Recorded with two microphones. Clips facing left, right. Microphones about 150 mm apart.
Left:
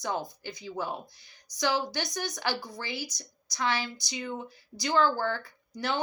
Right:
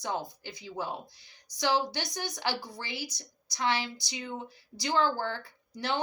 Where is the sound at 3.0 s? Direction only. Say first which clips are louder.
Left 1 dB; 15° left (ahead or behind).